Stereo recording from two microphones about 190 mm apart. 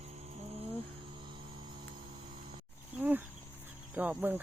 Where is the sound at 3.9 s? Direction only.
10° right (ahead or behind).